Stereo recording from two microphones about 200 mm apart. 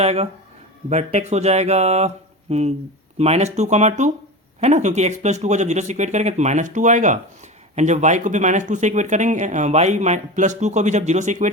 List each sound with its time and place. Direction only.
0.0 s speech: 30° right (ahead or behind)